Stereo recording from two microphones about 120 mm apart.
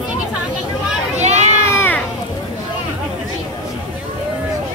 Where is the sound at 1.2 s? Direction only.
70° right (ahead or behind).